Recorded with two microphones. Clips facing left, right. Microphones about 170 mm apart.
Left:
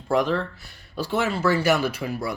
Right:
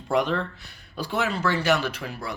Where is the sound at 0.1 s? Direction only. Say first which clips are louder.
Left 2 dB; centre (ahead or behind).